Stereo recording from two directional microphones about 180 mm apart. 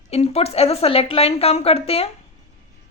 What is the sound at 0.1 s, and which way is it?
Speech, 35° left (ahead or behind).